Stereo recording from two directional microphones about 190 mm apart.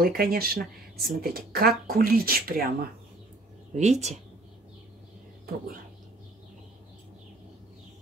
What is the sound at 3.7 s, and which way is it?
Speech, 35° right (ahead or behind).